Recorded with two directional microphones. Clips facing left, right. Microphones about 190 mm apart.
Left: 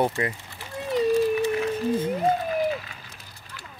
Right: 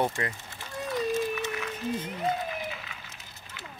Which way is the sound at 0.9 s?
30° left (ahead or behind).